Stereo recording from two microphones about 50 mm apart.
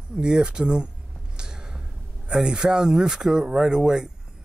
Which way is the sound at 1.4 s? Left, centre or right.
Centre.